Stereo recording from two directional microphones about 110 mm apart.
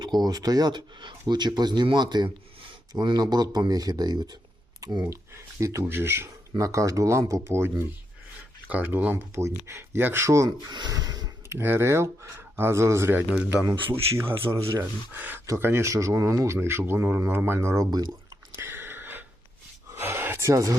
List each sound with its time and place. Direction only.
0.0 s speech: 40° right (ahead or behind)
10.7 s speech: 40° right (ahead or behind)
11.4 s speech: 20° right (ahead or behind)
18.5 s a sound: 20° right (ahead or behind)